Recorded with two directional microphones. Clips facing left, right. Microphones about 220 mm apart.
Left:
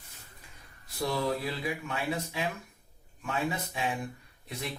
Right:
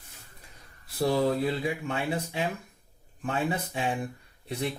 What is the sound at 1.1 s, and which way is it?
Speech, 30° right (ahead or behind).